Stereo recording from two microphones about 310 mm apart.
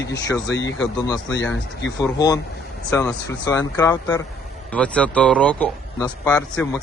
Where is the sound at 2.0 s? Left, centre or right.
Centre.